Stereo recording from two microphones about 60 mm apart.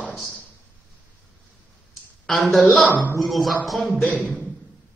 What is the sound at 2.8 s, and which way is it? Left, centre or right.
Speech, left.